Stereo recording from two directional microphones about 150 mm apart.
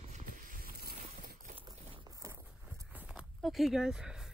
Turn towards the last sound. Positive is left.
turn(degrees=-5)  # may be behind; listen again after turning